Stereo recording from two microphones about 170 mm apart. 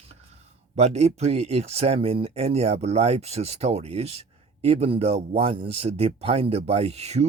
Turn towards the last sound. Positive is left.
turn(degrees=-40)  # may be behind; listen again after turning